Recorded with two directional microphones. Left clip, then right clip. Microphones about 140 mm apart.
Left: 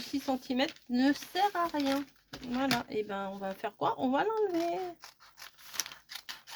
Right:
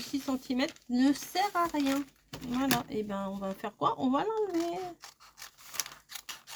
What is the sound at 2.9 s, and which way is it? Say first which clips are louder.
Speech: even; 35° left (ahead or behind).